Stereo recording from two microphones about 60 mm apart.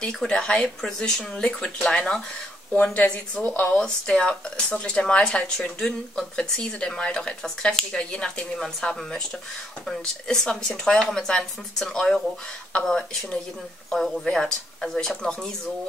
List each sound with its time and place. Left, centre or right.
0.3 s speech: centre
2.7 s a woman's voice: left
13.8 s speech: centre